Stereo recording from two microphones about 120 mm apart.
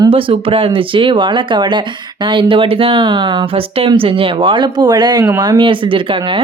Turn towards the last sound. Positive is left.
turn(degrees=-45)  # may be behind; listen again after turning